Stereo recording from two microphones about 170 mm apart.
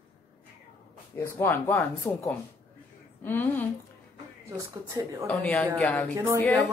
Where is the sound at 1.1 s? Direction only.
15° left (ahead or behind).